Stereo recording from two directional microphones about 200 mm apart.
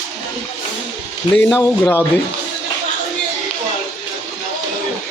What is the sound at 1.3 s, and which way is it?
Speech, 5° left (ahead or behind).